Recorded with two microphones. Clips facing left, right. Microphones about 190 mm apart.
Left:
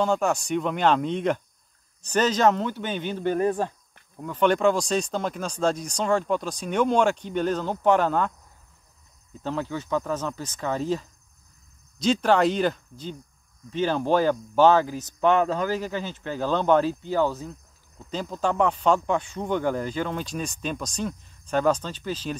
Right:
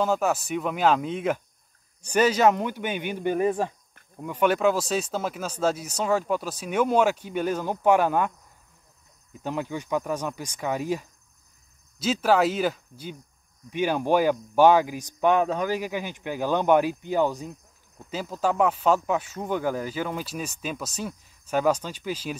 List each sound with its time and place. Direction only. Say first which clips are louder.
0.0 s speech: left 1 dB; 5° right (ahead or behind)
9.4 s speech: left 1 dB; 15° right (ahead or behind)